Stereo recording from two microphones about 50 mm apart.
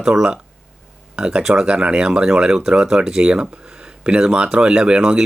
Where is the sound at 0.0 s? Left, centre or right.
Centre.